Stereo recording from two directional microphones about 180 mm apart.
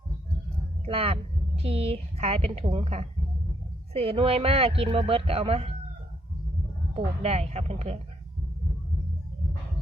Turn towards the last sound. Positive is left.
turn(degrees=-40)  # may be behind; listen again after turning